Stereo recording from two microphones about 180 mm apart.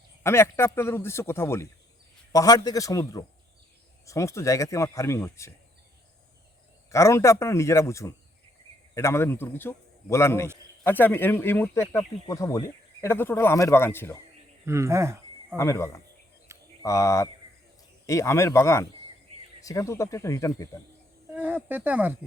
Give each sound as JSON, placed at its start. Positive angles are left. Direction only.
{"t": 0.2, "sound": "a man's voice", "side_deg": 15}
{"t": 6.9, "sound": "speech", "side_deg": 15}
{"t": 14.6, "sound": "speech", "side_deg": -15}
{"t": 15.5, "sound": "speech", "side_deg": 15}
{"t": 16.5, "sound": "a sound", "side_deg": -15}
{"t": 16.8, "sound": "speech", "side_deg": 15}
{"t": 21.3, "sound": "speech", "side_deg": -10}